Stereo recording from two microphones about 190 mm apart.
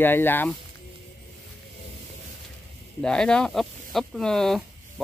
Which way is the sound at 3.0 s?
5° left (ahead or behind).